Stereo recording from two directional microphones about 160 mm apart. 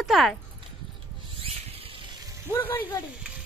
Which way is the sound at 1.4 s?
35° right (ahead or behind).